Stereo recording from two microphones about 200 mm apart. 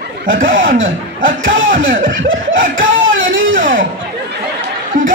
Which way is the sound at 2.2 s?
75° right (ahead or behind).